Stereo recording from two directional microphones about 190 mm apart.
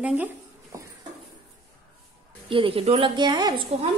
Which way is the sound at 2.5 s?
30° right (ahead or behind).